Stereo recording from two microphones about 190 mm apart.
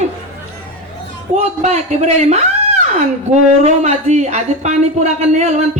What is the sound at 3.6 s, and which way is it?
A woman's voice, 35° right (ahead or behind).